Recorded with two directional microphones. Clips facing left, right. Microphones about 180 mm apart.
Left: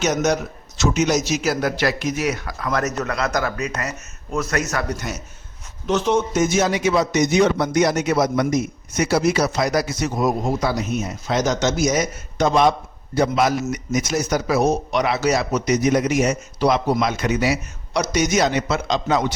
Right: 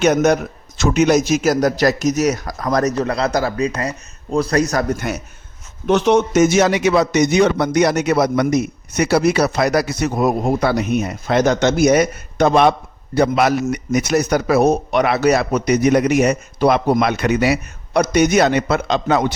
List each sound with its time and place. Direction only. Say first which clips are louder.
0.0 s a man's voice: right 6 dB; 55° right (ahead or behind); by 4.9 s 35° right (ahead or behind)
4.9 s a man's voice: right 6 dB; 55° right (ahead or behind)